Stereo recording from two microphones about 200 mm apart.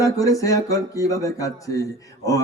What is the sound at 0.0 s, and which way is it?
A man's voice, 15° left (ahead or behind).